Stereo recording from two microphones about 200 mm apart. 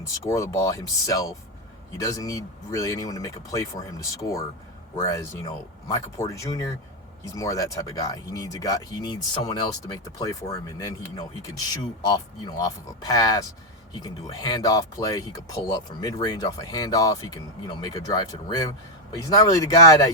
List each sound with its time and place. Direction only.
0.3 s speech: 15° left (ahead or behind)
12.0 s speech: 20° left (ahead or behind)